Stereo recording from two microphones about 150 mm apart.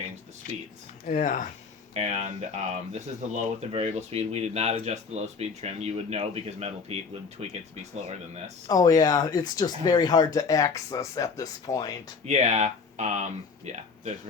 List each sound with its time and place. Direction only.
0.4 s speech: 70° left (ahead or behind)
1.9 s speech: 45° right (ahead or behind)
8.6 s speech: 25° left (ahead or behind)
12.2 s speech: 50° right (ahead or behind)